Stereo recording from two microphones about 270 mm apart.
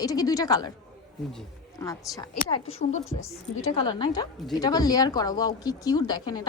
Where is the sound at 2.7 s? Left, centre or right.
Left.